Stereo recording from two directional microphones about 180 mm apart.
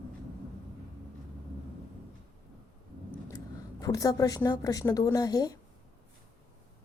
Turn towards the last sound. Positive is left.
turn(degrees=20)  # may be behind; listen again after turning